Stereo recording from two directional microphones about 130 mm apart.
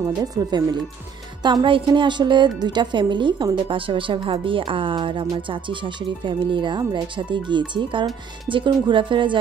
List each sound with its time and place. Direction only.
0.0 s speech: 30° right (ahead or behind)